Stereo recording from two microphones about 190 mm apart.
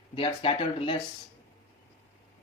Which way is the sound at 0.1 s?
30° left (ahead or behind).